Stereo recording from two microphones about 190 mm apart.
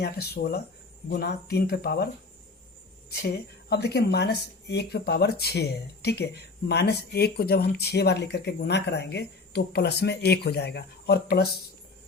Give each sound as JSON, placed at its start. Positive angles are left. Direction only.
{"t": 0.0, "sound": "speech", "side_deg": 55}
{"t": 3.7, "sound": "speech", "side_deg": 60}